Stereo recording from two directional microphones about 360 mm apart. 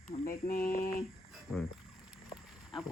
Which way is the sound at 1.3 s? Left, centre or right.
Centre.